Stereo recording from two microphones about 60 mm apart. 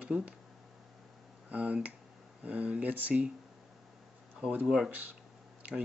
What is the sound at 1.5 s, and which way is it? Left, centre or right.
Speech, right.